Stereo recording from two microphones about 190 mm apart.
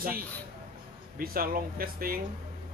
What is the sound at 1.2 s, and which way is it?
Speech, 50° right (ahead or behind).